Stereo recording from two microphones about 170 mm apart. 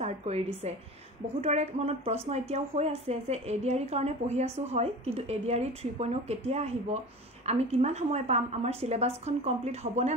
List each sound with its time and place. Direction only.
0.0 s speech: 40° right (ahead or behind)